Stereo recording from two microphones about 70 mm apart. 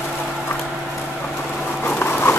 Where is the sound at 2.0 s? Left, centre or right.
Left.